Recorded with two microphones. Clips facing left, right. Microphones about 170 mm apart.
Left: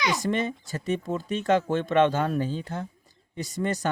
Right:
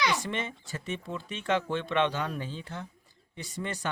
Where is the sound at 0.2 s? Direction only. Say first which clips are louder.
Left 8 dB; 40° left (ahead or behind).